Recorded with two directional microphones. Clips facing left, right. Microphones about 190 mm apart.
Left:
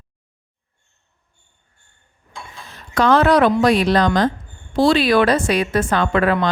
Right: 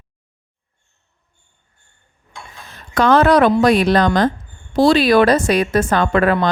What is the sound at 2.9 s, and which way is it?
A woman's voice, 50° right (ahead or behind).